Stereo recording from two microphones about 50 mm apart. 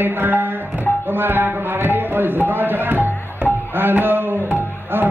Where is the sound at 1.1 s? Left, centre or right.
Right.